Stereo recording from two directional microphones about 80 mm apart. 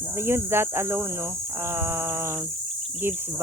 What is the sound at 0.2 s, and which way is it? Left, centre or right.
Speech, right.